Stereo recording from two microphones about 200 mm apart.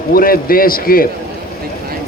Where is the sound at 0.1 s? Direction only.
45° left (ahead or behind).